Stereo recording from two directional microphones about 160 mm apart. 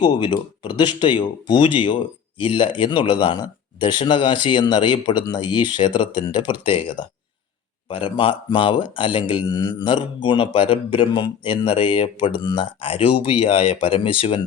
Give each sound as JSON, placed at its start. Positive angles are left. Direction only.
{"t": 0.0, "sound": "speech", "side_deg": 30}